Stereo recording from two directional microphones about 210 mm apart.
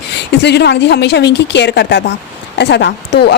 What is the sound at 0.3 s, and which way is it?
Speech, 55° left (ahead or behind).